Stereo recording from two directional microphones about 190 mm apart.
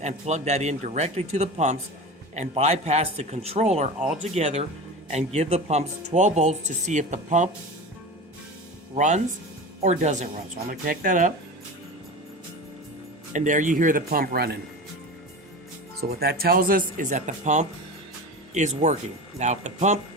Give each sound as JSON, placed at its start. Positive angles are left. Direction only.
{"t": 0.0, "sound": "speech", "side_deg": -35}
{"t": 9.0, "sound": "speech", "side_deg": -40}
{"t": 13.3, "sound": "speech", "side_deg": -40}
{"t": 16.0, "sound": "speech", "side_deg": -55}